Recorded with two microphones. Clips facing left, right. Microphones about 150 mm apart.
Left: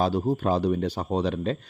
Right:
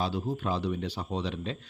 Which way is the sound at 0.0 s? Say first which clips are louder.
Left 7 dB; 45° left (ahead or behind).